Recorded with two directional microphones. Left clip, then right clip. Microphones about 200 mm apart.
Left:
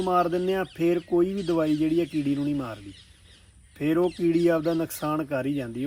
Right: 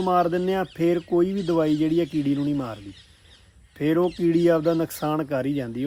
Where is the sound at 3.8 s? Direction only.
20° right (ahead or behind).